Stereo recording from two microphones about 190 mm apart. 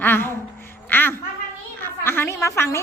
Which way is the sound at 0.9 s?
10° left (ahead or behind).